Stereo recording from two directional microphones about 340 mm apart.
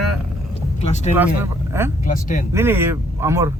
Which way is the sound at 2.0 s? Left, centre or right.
Left.